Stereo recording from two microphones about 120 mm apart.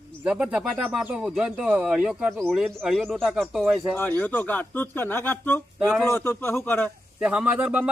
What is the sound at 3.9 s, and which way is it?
A man's voice, 15° left (ahead or behind).